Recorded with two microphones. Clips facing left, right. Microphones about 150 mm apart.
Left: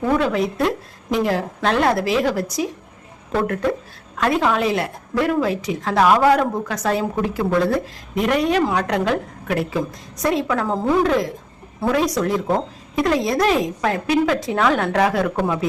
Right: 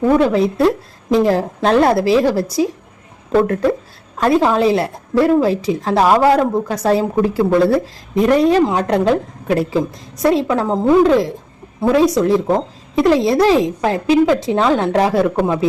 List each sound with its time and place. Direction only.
0.2 s a woman's voice: 30° right (ahead or behind)